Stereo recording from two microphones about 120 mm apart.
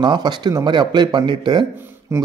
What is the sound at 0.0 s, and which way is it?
A man's voice, 40° right (ahead or behind).